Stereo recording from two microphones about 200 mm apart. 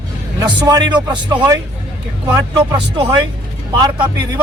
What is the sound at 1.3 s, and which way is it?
Speech, 20° right (ahead or behind).